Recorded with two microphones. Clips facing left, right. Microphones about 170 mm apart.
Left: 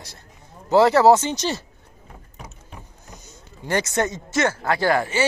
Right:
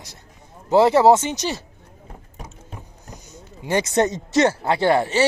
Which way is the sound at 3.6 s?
15° right (ahead or behind).